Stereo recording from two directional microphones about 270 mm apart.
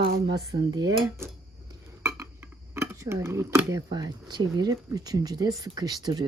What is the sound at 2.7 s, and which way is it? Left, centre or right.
Speech, centre.